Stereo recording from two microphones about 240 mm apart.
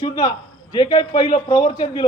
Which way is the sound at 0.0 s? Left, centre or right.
Centre.